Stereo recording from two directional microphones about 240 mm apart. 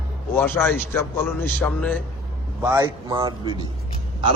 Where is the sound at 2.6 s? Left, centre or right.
Centre.